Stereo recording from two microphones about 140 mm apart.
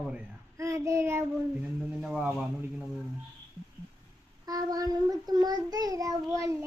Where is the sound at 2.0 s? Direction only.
5° right (ahead or behind).